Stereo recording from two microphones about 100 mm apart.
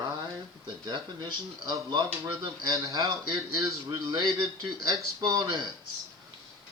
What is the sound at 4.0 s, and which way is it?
Speech, 45° right (ahead or behind).